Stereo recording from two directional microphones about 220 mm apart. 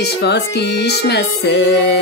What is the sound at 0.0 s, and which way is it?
Music, 50° left (ahead or behind).